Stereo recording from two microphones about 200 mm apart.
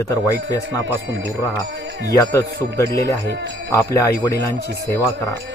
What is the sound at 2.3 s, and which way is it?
Speech, 15° left (ahead or behind).